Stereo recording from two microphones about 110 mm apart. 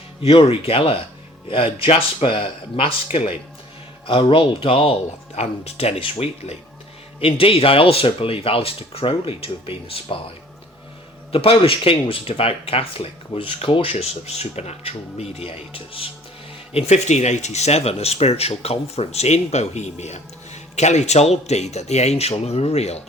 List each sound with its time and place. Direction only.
0.2 s speech: 60° left (ahead or behind)
4.0 s speech: 50° left (ahead or behind); by 6.6 s 70° left (ahead or behind)
7.2 s speech: 55° left (ahead or behind)
11.3 s speech: 60° left (ahead or behind)
16.7 s speech: 85° left